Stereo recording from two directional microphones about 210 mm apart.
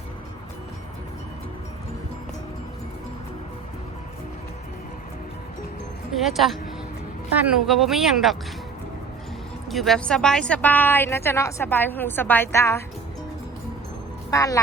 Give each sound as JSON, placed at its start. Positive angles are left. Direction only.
{"t": 6.1, "sound": "speech", "side_deg": 0}
{"t": 9.6, "sound": "a woman's voice", "side_deg": 0}
{"t": 14.3, "sound": "a woman's voice", "side_deg": 15}